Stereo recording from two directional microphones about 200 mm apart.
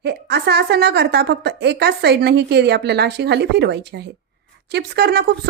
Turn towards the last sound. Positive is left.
turn(degrees=-55)  # may be behind; listen again after turning